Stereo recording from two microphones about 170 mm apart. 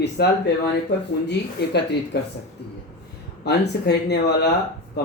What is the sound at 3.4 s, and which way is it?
Speech, 75° left (ahead or behind).